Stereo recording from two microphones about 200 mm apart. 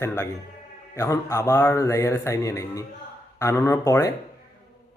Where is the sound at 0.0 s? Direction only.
10° left (ahead or behind).